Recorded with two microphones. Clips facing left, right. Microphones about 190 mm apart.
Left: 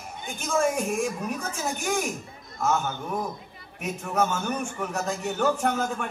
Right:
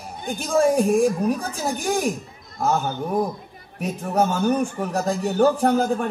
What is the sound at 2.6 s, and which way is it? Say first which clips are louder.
A man's voice: right 4 dB; 35° right (ahead or behind).